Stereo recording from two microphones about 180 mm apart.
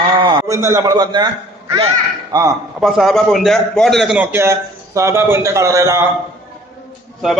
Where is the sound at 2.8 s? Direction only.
Centre (ahead or behind); by 6.1 s 15° right (ahead or behind).